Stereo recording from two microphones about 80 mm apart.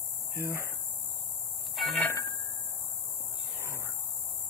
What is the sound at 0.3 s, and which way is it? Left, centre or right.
Speech, right.